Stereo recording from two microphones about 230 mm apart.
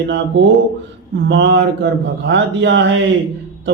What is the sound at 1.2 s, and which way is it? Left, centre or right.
A man's voice, right.